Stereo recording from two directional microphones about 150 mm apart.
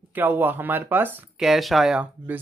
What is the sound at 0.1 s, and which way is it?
Speech, 15° right (ahead or behind).